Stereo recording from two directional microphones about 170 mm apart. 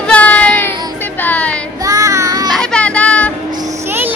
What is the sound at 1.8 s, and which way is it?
Child singing, 20° right (ahead or behind).